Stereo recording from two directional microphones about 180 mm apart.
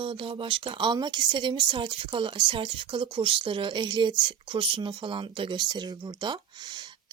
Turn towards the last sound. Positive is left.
turn(degrees=-25)  # may be behind; listen again after turning